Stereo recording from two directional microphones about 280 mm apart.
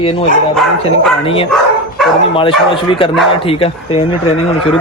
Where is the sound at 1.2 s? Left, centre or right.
Centre.